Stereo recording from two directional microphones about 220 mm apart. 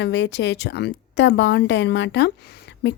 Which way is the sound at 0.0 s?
50° left (ahead or behind).